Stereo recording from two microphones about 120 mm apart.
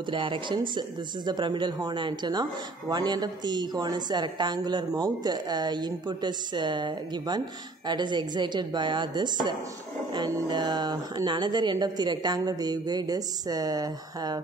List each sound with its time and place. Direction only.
0.1 s a woman's voice: 45° right (ahead or behind)